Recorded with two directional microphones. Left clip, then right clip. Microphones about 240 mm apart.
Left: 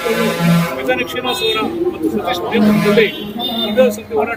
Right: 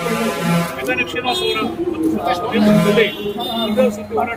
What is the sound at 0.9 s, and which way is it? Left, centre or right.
Speech, centre.